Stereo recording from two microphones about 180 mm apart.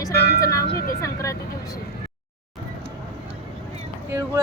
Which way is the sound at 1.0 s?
15° left (ahead or behind).